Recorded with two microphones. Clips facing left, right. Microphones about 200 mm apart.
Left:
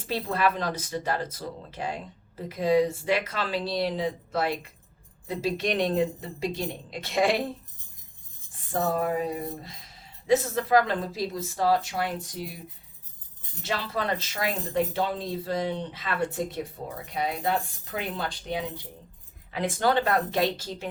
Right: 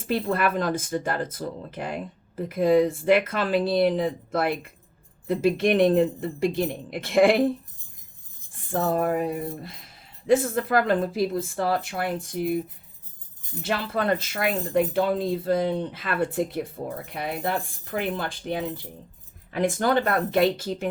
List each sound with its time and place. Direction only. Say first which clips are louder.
0.1 s speech: right 3 dB; 50° right (ahead or behind)
8.7 s speech: right 3 dB; 55° right (ahead or behind)
13.7 s speech: right 4 dB; 55° right (ahead or behind)
17.9 s speech: right 4 dB; 50° right (ahead or behind)